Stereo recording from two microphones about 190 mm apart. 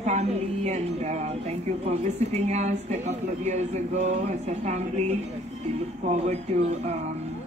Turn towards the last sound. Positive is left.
turn(degrees=-35)  # may be behind; listen again after turning